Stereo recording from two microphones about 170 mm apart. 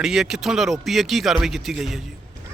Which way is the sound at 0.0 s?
5° right (ahead or behind).